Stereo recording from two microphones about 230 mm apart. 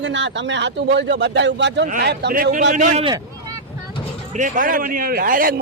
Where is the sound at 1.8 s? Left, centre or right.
Right.